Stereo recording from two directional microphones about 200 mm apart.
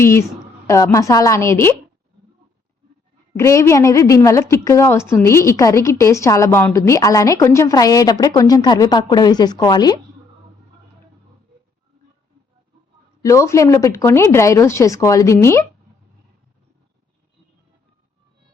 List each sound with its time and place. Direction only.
0.0 s a woman's voice: 15° left (ahead or behind)
3.3 s a woman's voice: 15° left (ahead or behind)
13.2 s a woman's voice: 15° left (ahead or behind)